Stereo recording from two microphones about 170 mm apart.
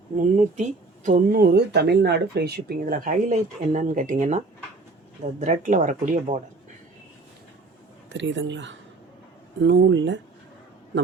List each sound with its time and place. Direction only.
0.2 s speech: 45° right (ahead or behind)
8.1 s speech: 90° right